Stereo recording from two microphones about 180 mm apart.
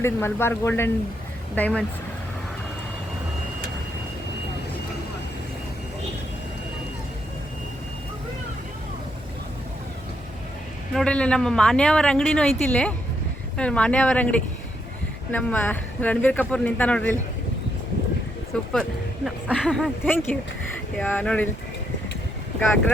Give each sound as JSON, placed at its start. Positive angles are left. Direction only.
{"t": 0.0, "sound": "speech", "side_deg": 15}
{"t": 10.9, "sound": "speech", "side_deg": 5}
{"t": 18.7, "sound": "speech", "side_deg": 5}